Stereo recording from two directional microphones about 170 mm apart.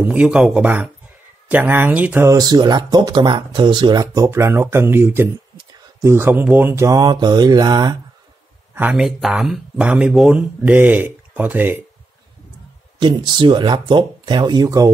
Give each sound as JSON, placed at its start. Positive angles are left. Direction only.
{"t": 0.1, "sound": "speech", "side_deg": -5}
{"t": 8.7, "sound": "speech", "side_deg": -5}
{"t": 13.0, "sound": "speech", "side_deg": -25}